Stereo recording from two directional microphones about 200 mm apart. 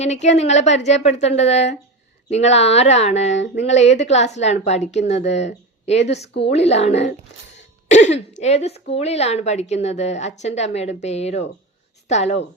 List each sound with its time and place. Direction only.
0.0 s a woman's voice: 35° left (ahead or behind)
6.1 s speech: 60° left (ahead or behind)
6.5 s a woman's voice: 30° left (ahead or behind)